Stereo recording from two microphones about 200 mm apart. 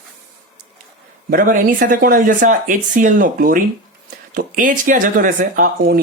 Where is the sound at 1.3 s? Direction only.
40° right (ahead or behind).